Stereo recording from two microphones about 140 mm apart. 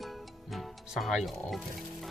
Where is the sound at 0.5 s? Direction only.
Centre (ahead or behind).